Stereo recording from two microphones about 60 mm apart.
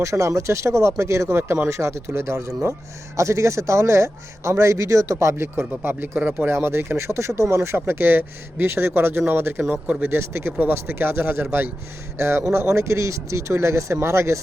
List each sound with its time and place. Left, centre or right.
0.0 s speech: right
6.5 s speech: right
12.1 s speech: right